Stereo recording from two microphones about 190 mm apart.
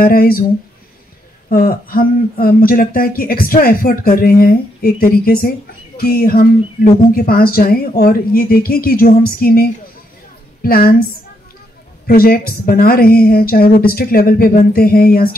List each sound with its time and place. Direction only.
0.0 s speech: 50° left (ahead or behind)
1.5 s speech: 50° left (ahead or behind)
12.1 s speech: 50° left (ahead or behind)